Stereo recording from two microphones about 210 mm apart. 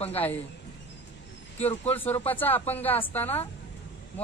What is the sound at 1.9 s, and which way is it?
A man's voice, 10° left (ahead or behind).